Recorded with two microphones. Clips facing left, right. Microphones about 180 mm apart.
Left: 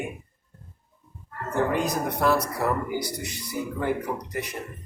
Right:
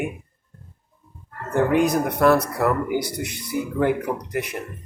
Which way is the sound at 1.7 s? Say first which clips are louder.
Right 6 dB; 60° right (ahead or behind).